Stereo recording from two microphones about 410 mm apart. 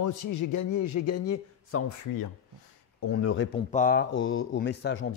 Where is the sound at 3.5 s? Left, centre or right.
Centre.